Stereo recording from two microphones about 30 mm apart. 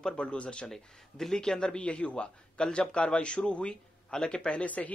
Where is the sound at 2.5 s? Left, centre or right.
Left.